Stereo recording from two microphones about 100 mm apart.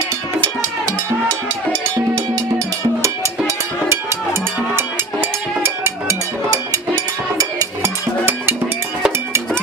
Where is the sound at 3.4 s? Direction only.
25° right (ahead or behind).